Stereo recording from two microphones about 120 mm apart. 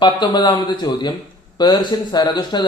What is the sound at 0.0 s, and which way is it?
Speech, 35° left (ahead or behind).